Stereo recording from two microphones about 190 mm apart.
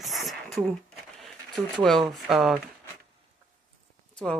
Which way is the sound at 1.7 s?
Centre (ahead or behind).